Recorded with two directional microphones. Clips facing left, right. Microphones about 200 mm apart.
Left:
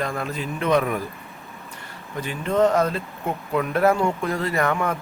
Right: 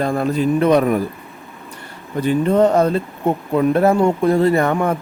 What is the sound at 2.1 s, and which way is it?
Speech, 35° right (ahead or behind).